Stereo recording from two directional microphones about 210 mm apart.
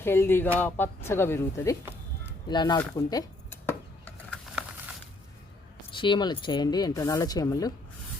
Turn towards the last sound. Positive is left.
turn(degrees=15)  # may be behind; listen again after turning